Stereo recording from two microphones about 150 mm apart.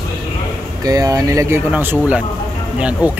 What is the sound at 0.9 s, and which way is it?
Speech, 25° right (ahead or behind).